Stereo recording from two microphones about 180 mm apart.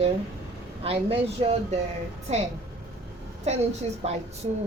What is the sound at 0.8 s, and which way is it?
A woman's voice, 35° right (ahead or behind).